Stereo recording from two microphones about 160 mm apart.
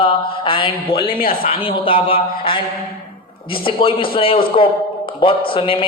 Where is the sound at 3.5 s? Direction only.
35° left (ahead or behind).